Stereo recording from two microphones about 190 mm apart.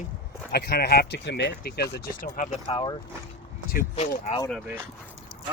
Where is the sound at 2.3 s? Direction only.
35° left (ahead or behind).